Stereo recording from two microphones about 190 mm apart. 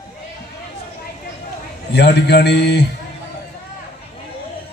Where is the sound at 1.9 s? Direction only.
60° left (ahead or behind).